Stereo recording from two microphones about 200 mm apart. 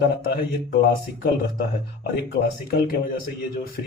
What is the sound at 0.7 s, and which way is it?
Speech, 50° left (ahead or behind).